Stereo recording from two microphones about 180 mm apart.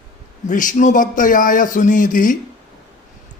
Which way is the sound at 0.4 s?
45° left (ahead or behind).